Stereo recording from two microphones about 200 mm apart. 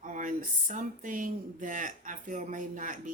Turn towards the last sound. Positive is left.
turn(degrees=-40)  # may be behind; listen again after turning